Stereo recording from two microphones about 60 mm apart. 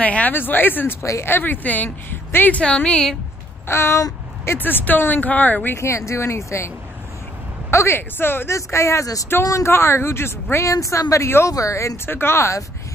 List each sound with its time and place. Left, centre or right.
0.0 s a woman's voice: left
2.6 s a woman's voice: centre
3.6 s speech: left
4.5 s a woman's voice: left
5.8 s speech: left
7.7 s speech: left
8.5 s speech: left
9.0 s speech: left
9.7 s speech: left
10.7 s speech: left
12.1 s speech: left